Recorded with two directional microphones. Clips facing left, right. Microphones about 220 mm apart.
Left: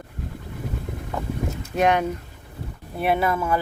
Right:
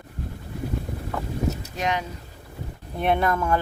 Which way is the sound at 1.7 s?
55° left (ahead or behind).